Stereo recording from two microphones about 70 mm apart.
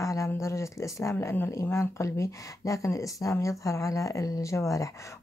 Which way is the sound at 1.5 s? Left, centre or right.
Left.